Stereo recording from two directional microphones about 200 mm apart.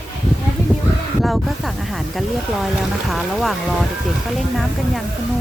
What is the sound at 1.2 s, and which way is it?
Speech, centre (ahead or behind).